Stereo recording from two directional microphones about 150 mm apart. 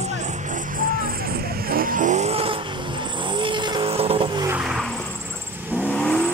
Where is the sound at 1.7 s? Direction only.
70° right (ahead or behind); by 4.3 s 40° right (ahead or behind).